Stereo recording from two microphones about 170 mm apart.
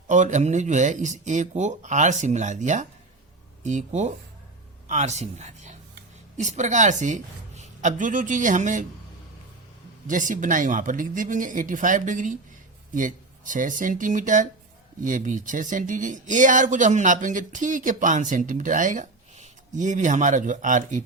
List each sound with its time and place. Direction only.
0.1 s speech: 45° right (ahead or behind)
10.1 s speech: 50° right (ahead or behind)